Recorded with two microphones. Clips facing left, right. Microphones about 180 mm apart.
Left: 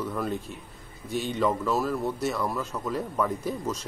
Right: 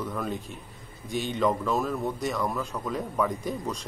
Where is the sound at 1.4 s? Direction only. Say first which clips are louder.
Even; 5° left (ahead or behind).